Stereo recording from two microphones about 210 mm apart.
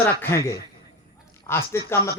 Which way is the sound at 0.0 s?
10° left (ahead or behind).